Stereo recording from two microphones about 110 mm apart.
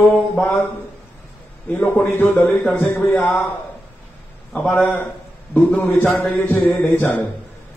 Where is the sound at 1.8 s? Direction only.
20° left (ahead or behind).